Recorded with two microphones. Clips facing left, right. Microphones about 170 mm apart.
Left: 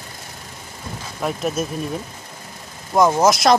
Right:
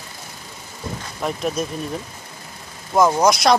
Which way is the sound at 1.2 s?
Centre (ahead or behind).